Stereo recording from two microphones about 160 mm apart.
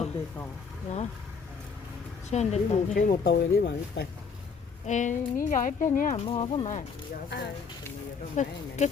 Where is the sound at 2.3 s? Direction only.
45° left (ahead or behind).